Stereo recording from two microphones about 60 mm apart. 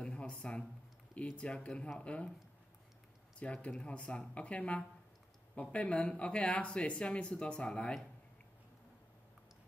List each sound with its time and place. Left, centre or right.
0.0 s a sound: centre
1.1 s speech: left
3.3 s speech: left